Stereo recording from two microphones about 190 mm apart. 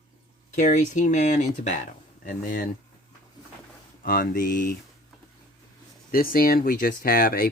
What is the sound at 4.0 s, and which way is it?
Speech, 50° left (ahead or behind).